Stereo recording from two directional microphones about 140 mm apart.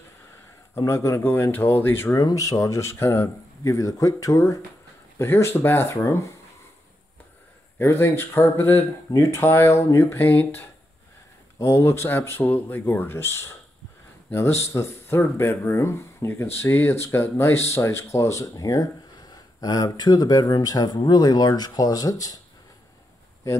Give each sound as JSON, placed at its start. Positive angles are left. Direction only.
{"t": 0.7, "sound": "speech", "side_deg": 20}
{"t": 7.8, "sound": "speech", "side_deg": 15}